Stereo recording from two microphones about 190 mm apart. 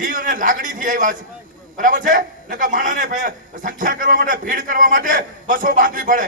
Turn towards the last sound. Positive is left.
turn(degrees=-45)  # may be behind; listen again after turning